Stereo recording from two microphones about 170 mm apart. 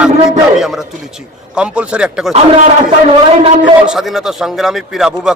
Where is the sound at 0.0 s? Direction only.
Centre (ahead or behind).